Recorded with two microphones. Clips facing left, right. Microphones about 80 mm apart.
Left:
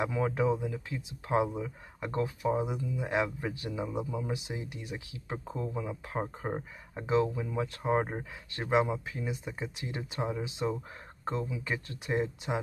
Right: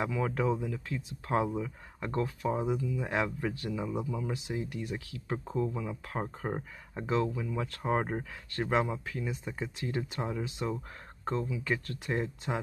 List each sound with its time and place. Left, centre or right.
0.1 s speech: centre